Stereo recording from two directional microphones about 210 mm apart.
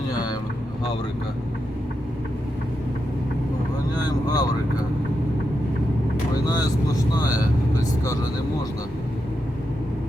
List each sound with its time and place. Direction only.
3.9 s vehicle: 20° left (ahead or behind)
7.1 s speech: 20° left (ahead or behind)